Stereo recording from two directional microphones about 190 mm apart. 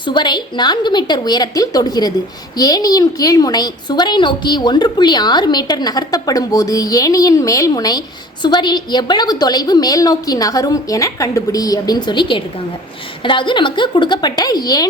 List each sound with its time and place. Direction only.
0.0 s a woman's voice: 25° left (ahead or behind)